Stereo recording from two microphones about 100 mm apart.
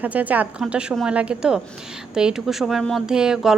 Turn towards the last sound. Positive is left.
turn(degrees=-5)  # may be behind; listen again after turning